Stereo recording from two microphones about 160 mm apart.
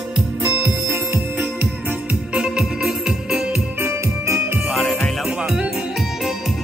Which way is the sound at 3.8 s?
15° right (ahead or behind).